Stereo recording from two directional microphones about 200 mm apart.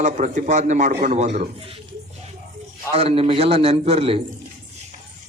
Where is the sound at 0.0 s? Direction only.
35° right (ahead or behind).